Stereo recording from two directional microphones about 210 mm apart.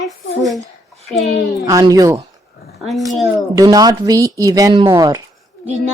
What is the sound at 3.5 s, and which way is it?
A woman's voice, 15° right (ahead or behind).